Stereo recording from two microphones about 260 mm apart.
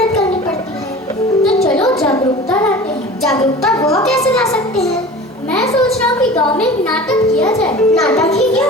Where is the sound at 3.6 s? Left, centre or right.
Centre.